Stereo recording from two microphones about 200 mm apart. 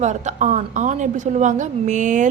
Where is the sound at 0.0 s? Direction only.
35° right (ahead or behind).